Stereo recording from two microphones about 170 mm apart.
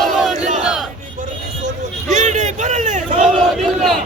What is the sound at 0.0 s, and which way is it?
Battle cry, centre (ahead or behind).